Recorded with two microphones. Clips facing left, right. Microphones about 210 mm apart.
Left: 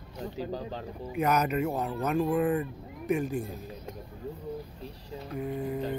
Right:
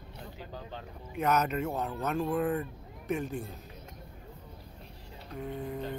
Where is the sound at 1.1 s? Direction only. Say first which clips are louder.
Left 2 dB; 10° left (ahead or behind).